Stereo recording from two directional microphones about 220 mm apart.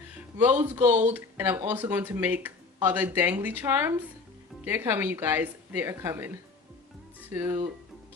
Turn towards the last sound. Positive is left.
turn(degrees=-10)  # may be behind; listen again after turning